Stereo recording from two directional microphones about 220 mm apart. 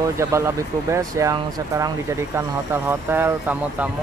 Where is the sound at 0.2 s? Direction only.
15° right (ahead or behind).